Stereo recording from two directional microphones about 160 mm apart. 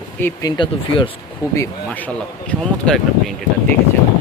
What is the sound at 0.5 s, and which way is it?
Speech, 30° left (ahead or behind).